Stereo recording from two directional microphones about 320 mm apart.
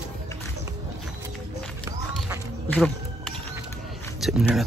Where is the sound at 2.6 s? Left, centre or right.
Centre.